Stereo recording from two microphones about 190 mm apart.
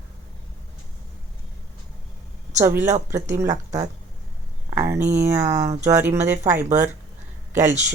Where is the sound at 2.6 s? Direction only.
15° right (ahead or behind).